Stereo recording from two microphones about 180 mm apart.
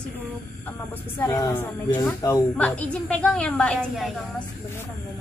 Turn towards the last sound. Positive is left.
turn(degrees=0)  # may be behind; listen again after turning